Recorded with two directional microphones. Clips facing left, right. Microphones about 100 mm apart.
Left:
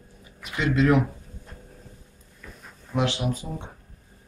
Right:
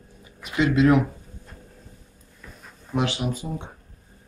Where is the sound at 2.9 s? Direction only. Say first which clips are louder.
Even; 10° right (ahead or behind).